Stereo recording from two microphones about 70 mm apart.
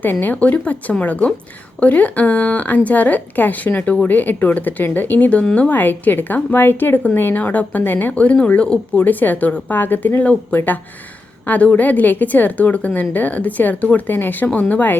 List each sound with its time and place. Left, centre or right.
0.0 s speech: left